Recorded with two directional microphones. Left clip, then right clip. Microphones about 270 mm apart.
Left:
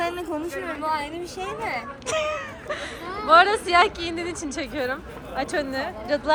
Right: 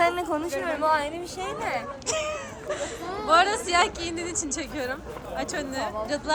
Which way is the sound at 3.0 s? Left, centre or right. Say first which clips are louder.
Left 1 dB; right.